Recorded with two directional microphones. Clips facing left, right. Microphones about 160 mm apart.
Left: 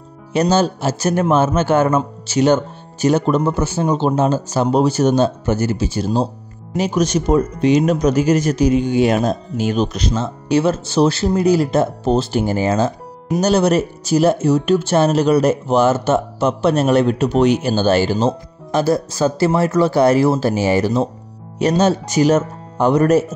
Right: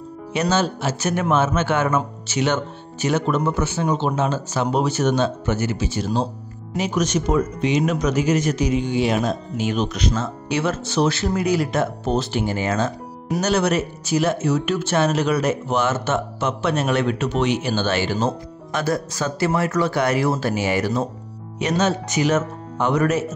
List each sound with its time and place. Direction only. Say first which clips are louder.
0.3 s speech: left 5 dB; 35° left (ahead or behind)